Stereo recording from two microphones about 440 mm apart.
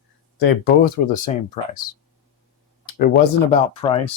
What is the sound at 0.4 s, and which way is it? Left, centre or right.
Speech, centre.